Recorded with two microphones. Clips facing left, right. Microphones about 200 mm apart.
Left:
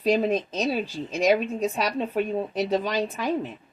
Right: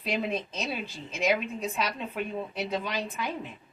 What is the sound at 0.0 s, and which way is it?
Speech, 40° left (ahead or behind).